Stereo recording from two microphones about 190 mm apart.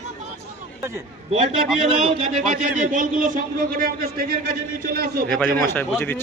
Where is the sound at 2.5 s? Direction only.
40° right (ahead or behind).